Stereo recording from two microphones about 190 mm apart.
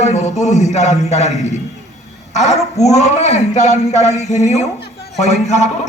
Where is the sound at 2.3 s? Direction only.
35° left (ahead or behind).